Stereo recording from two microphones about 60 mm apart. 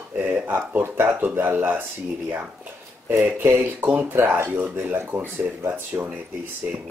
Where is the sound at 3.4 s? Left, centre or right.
Right.